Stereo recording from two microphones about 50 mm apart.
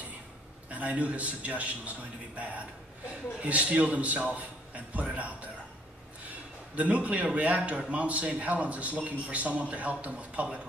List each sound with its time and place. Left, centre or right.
0.7 s a man's voice: right
6.7 s a man's voice: right